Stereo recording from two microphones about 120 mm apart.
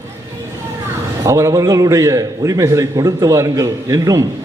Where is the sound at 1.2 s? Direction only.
25° right (ahead or behind).